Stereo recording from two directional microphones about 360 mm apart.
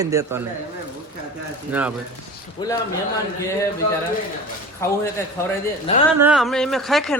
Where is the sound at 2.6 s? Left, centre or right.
Centre.